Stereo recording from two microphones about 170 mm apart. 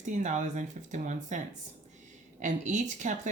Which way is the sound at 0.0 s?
45° right (ahead or behind).